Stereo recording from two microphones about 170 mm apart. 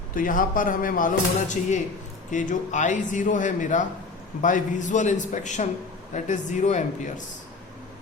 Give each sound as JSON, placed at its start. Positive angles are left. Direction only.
{"t": 0.1, "sound": "speech", "side_deg": 55}